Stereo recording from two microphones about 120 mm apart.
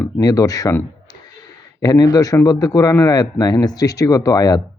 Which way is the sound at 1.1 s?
35° left (ahead or behind).